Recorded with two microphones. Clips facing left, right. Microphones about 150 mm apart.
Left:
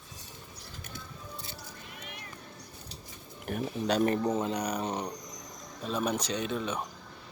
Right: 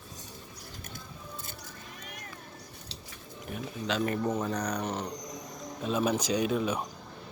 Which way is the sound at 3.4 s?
50° left (ahead or behind).